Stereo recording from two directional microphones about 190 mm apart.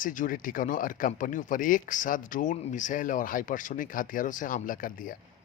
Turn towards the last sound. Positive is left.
turn(degrees=45)  # may be behind; listen again after turning